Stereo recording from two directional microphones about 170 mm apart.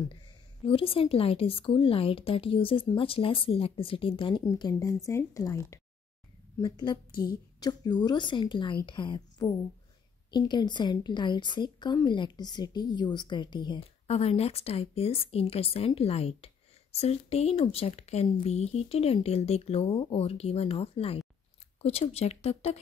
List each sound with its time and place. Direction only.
0.7 s a woman's voice: 35° left (ahead or behind)